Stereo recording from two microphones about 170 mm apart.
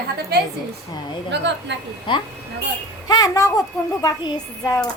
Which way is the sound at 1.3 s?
90° right.